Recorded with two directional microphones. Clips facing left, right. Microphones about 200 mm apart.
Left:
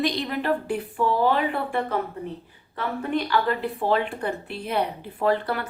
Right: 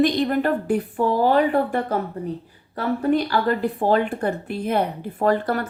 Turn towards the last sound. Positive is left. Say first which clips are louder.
# right 3 dB
turn(degrees=-45)  # may be behind; listen again after turning